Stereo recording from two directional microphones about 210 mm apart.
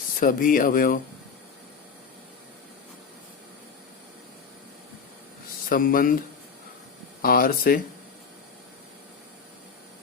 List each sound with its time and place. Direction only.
0.2 s speech: 40° left (ahead or behind)
5.6 s speech: 40° left (ahead or behind)
7.2 s speech: 45° left (ahead or behind)